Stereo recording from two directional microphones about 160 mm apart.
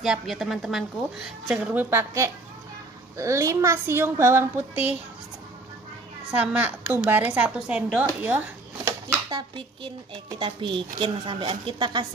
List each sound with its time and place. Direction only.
0.0 s a woman's voice: centre (ahead or behind)
6.3 s speech: 10° right (ahead or behind)
9.3 s a woman's voice: 30° right (ahead or behind)